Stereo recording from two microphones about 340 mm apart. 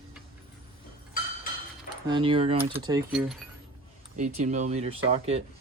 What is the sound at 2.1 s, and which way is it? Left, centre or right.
Speech, centre.